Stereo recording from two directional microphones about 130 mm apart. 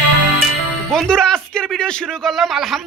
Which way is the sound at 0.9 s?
5° left (ahead or behind).